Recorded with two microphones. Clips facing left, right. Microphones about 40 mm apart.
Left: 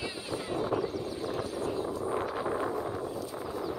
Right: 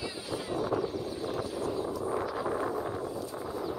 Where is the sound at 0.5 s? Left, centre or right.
Left.